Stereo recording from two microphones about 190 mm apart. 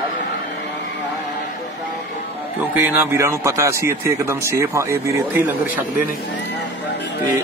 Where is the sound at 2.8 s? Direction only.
15° right (ahead or behind).